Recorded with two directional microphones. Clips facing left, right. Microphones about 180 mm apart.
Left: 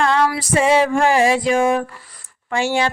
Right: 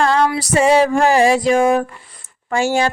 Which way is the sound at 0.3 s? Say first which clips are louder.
Right 2 dB; 40° right (ahead or behind).